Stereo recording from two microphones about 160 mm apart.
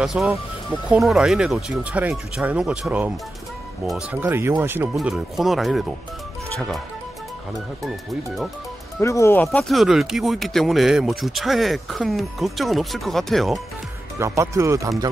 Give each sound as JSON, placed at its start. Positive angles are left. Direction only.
{"t": 0.0, "sound": "speech", "side_deg": 0}
{"t": 4.2, "sound": "speech", "side_deg": -15}
{"t": 4.9, "sound": "speech", "side_deg": 0}
{"t": 7.8, "sound": "speech", "side_deg": 0}
{"t": 9.0, "sound": "speech", "side_deg": 20}
{"t": 14.1, "sound": "speech", "side_deg": -20}